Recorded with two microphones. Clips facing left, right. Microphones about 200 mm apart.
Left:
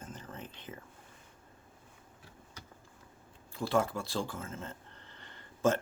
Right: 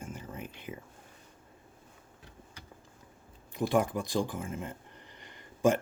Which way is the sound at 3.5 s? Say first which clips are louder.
Right 3 dB; 15° right (ahead or behind).